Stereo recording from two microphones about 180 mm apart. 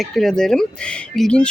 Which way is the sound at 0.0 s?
Centre (ahead or behind).